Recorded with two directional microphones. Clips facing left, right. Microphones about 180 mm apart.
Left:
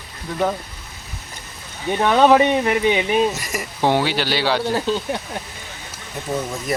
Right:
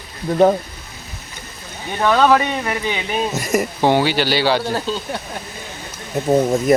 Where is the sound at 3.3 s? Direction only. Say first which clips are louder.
Right 9 dB; 45° right (ahead or behind).